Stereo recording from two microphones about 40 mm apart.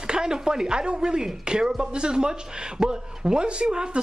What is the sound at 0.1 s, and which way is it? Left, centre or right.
Speech, centre.